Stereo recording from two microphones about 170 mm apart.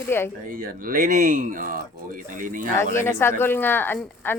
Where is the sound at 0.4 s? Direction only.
55° right (ahead or behind).